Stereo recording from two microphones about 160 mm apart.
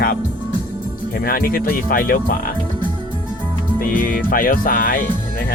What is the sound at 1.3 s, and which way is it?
Speech, 65° left (ahead or behind).